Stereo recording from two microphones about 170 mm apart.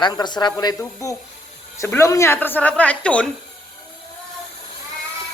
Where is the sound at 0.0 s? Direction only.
25° left (ahead or behind); by 3.2 s 5° left (ahead or behind).